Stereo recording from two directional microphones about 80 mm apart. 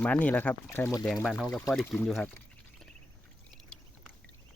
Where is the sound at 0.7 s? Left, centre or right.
Left.